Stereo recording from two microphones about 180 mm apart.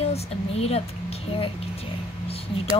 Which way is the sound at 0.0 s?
35° left (ahead or behind).